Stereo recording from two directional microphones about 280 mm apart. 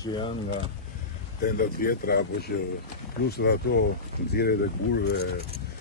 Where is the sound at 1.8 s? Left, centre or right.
Left.